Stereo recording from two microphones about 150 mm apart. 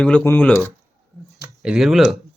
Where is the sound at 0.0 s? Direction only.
10° left (ahead or behind).